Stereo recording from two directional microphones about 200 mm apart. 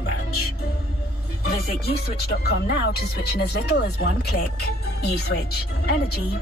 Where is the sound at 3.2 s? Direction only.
55° left (ahead or behind).